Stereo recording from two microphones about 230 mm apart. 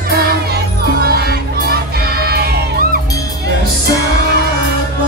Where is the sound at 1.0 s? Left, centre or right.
Right.